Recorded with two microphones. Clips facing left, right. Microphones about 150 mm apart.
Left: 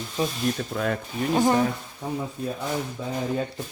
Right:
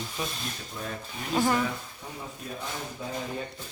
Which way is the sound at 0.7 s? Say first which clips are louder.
Left 10 dB; 75° left (ahead or behind).